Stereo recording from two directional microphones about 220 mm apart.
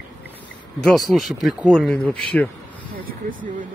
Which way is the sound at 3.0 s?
40° right (ahead or behind).